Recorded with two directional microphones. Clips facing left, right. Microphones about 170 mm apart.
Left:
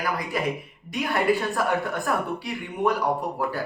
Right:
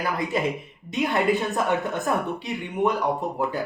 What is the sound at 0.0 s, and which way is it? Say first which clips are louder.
A woman's voice: right 2 dB; 25° right (ahead or behind).